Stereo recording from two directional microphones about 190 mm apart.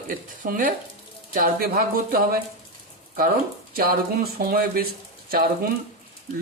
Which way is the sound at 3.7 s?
50° right (ahead or behind).